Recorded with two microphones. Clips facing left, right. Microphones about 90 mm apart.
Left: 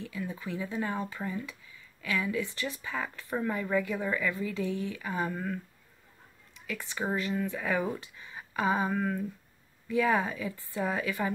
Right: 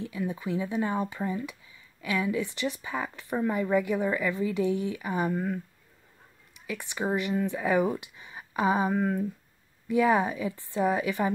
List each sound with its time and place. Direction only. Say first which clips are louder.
0.0 s a woman's voice: right 5 dB; 20° right (ahead or behind)